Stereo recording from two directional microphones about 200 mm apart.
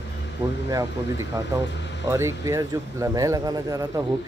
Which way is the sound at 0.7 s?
15° right (ahead or behind).